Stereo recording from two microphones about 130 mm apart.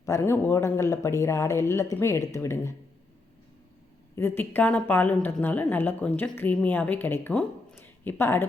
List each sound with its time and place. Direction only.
0.0 s a man's voice: 20° left (ahead or behind)
4.1 s a woman's voice: 15° left (ahead or behind)